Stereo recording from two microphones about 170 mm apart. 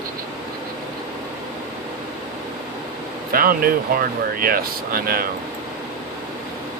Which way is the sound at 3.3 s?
60° right (ahead or behind).